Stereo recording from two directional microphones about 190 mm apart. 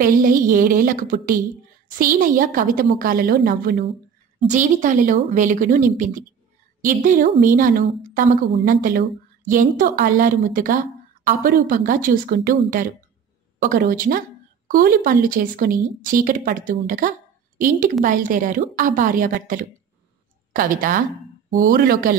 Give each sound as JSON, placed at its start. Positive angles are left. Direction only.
{"t": 0.0, "sound": "a woman's voice", "side_deg": -45}